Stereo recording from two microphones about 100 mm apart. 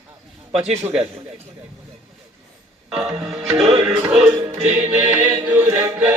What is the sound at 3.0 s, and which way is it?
Music, 20° right (ahead or behind).